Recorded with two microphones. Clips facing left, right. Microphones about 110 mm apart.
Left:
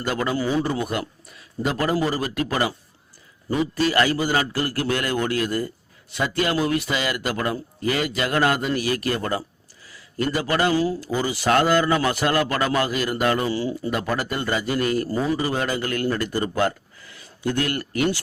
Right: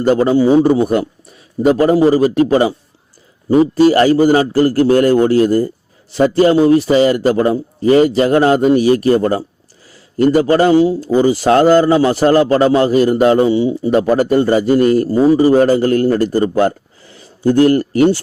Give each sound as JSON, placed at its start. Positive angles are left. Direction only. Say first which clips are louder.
{"t": 0.0, "sound": "a man's voice", "louder": "right 13 dB", "side_deg": -35}
{"t": 3.5, "sound": "a man's voice", "louder": "right 12 dB", "side_deg": -35}
{"t": 14.2, "sound": "a man's voice", "louder": "right 13 dB", "side_deg": -35}